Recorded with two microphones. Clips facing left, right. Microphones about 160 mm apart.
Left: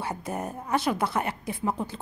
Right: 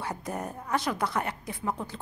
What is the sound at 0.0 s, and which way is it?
A woman's voice, 5° left (ahead or behind).